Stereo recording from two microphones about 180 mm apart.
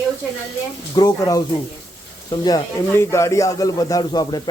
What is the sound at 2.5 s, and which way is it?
Speech, 20° left (ahead or behind).